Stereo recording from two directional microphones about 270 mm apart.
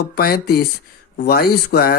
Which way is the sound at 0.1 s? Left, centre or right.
Left.